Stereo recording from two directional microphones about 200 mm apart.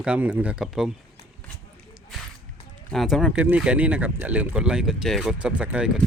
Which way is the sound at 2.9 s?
Centre (ahead or behind).